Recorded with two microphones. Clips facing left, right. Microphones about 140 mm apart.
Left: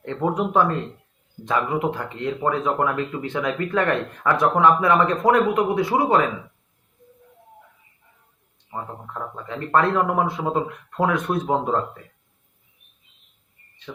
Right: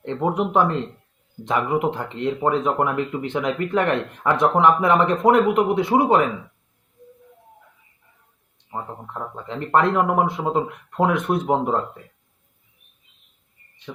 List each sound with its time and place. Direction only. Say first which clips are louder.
0.0 s speech: right 1 dB; 20° right (ahead or behind)
8.7 s speech: right 1 dB; 20° right (ahead or behind)
13.9 s insect: right 1 dB; 10° right (ahead or behind)